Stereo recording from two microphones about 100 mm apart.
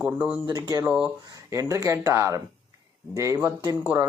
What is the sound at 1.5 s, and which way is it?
Speech, 35° right (ahead or behind).